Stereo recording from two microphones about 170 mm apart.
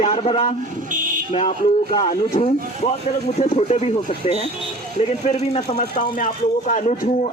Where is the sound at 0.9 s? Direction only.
55° right (ahead or behind).